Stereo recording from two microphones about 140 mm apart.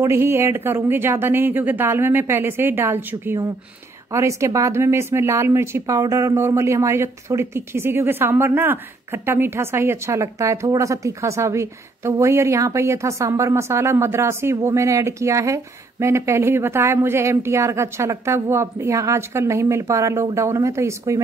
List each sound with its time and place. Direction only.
0.0 s speech: 20° right (ahead or behind)